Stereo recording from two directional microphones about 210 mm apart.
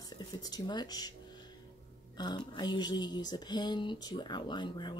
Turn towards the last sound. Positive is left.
turn(degrees=20)  # may be behind; listen again after turning